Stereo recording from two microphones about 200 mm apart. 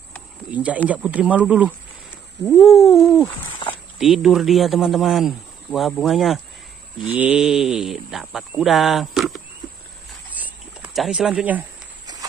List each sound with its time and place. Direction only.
0.5 s speech: 5° right (ahead or behind)
10.3 s a sound: 10° right (ahead or behind)
12.1 s walk: 20° right (ahead or behind)